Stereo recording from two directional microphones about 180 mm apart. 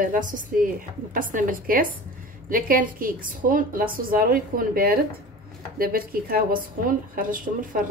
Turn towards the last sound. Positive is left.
turn(degrees=-50)  # may be behind; listen again after turning